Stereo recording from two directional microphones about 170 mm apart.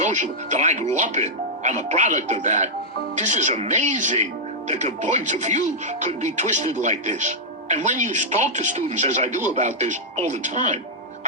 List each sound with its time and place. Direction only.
0.0 s speech: 45° right (ahead or behind)